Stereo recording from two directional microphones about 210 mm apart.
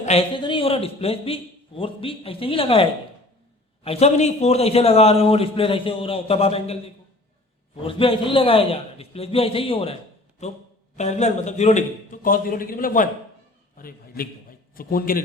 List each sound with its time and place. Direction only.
0.0 s a man's voice: 30° left (ahead or behind)
3.8 s a man's voice: 30° left (ahead or behind)